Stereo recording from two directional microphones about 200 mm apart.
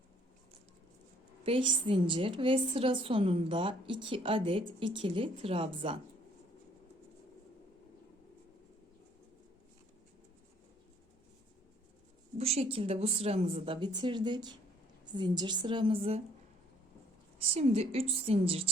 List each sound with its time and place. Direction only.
1.5 s a woman's voice: 25° right (ahead or behind)
12.4 s a woman's voice: 30° right (ahead or behind)
17.5 s a woman's voice: 30° right (ahead or behind)